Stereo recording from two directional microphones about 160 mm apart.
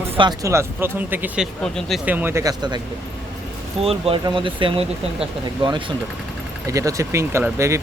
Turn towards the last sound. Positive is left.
turn(degrees=-15)  # may be behind; listen again after turning